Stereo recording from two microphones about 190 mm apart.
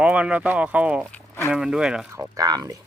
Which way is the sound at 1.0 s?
10° left (ahead or behind).